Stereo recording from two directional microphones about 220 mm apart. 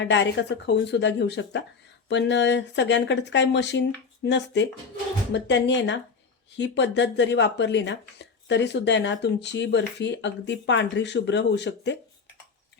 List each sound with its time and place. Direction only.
0.0 s speech: 55° left (ahead or behind)